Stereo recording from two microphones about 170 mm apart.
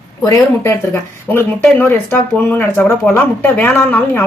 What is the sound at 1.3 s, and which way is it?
Speech, 10° left (ahead or behind).